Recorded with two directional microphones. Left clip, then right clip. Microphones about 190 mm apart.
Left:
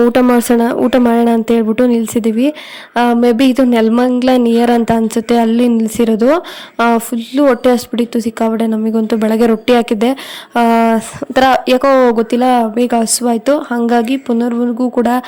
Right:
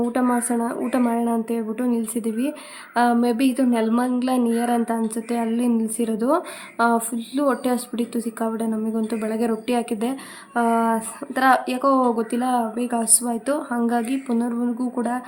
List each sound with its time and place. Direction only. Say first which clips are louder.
0.1 s speech: left 12 dB; 45° left (ahead or behind)